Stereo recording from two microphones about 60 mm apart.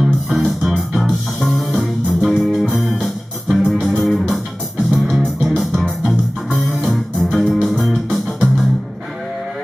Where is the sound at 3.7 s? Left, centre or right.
Centre.